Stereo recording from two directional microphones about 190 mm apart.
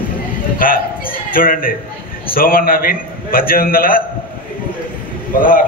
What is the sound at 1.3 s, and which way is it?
A man's voice, 50° left (ahead or behind).